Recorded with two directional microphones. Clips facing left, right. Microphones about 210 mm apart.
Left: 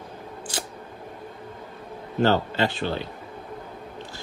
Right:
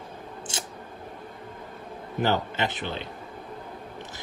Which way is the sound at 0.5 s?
25° right (ahead or behind).